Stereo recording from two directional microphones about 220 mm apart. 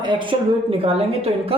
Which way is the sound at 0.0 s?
20° right (ahead or behind).